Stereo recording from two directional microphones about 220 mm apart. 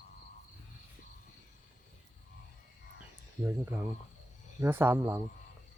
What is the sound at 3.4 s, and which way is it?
Speech, 10° right (ahead or behind).